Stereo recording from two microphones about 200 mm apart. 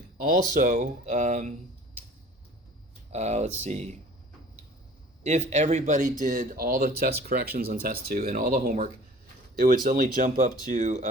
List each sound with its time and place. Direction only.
0.5 s speech: 40° right (ahead or behind)
3.1 s speech: 35° right (ahead or behind)
5.2 s speech: 35° right (ahead or behind)